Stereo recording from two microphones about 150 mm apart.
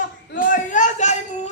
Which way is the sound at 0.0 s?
60° left (ahead or behind).